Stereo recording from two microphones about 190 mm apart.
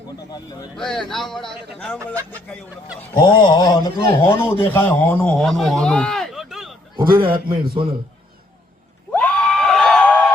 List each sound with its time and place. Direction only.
0.3 s speech: 20° left (ahead or behind)
0.8 s a man's voice: 5° left (ahead or behind)
3.2 s speech: 25° left (ahead or behind)
4.6 s a man's voice: 10° left (ahead or behind)
7.0 s a man's voice: 50° right (ahead or behind)
7.3 s a man's voice: 25° right (ahead or behind)
9.1 s screaming: 5° left (ahead or behind)